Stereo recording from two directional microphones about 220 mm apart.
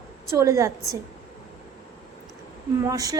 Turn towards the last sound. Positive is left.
turn(degrees=-15)  # may be behind; listen again after turning